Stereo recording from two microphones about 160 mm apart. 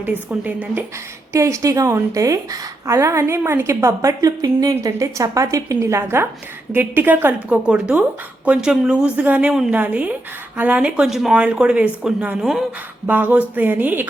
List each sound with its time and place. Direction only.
0.0 s a woman's voice: 10° right (ahead or behind)